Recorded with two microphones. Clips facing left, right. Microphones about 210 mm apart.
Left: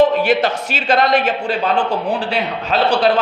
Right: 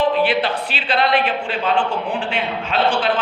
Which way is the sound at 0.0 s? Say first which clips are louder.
Left 4 dB; 45° left (ahead or behind).